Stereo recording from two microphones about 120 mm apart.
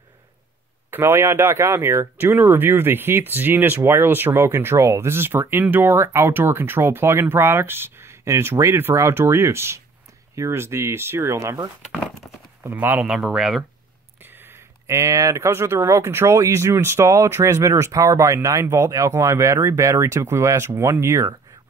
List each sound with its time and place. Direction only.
0.8 s speech: 20° right (ahead or behind); by 13.7 s 5° right (ahead or behind)
14.2 s speech: 20° right (ahead or behind)